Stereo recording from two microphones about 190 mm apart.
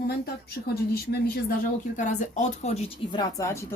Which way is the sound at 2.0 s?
40° left (ahead or behind).